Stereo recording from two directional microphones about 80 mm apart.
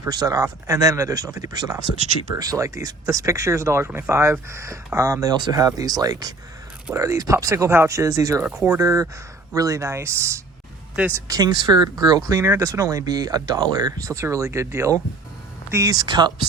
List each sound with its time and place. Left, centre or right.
0.1 s speech: right
6.9 s speech: right
11.3 s speech: right
11.6 s speech: right
12.3 s speech: right